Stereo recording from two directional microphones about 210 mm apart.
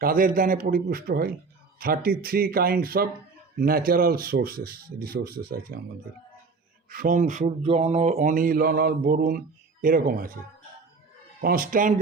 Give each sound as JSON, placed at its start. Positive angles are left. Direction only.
{"t": 0.0, "sound": "speech", "side_deg": -45}
{"t": 6.9, "sound": "speech", "side_deg": -40}
{"t": 11.3, "sound": "speech", "side_deg": -45}